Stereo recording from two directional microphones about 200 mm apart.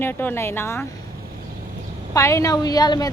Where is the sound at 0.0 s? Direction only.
10° left (ahead or behind).